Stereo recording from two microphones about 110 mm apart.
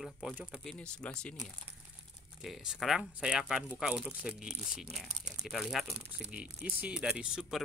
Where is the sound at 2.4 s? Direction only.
5° right (ahead or behind).